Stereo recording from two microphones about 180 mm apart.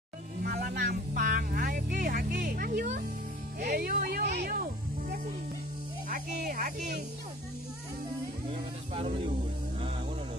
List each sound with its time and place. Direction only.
0.4 s music: 55° right (ahead or behind)
3.6 s a sound: 55° right (ahead or behind)
6.0 s speech: 50° right (ahead or behind)
8.9 s speech: 30° right (ahead or behind)